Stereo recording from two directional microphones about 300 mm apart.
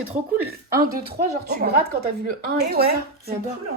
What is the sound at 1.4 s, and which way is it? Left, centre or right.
A woman's voice, right.